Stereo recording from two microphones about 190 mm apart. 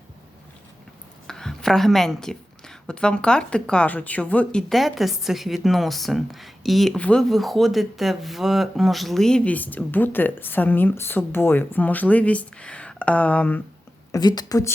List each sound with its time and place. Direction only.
1.3 s a woman's voice: 5° left (ahead or behind)
14.1 s a woman's voice: 20° left (ahead or behind)